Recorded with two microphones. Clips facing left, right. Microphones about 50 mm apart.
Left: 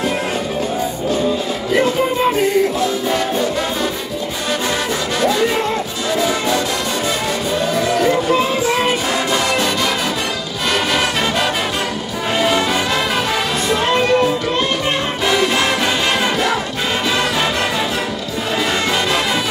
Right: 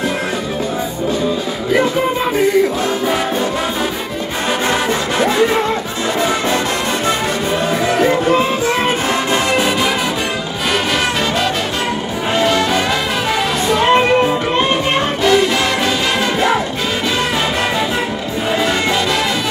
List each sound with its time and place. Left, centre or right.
5.2 s music: right
6.1 s brass instrument: right
8.8 s music: right
13.7 s music: right